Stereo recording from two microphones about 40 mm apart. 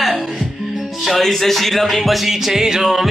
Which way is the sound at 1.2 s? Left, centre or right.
Centre.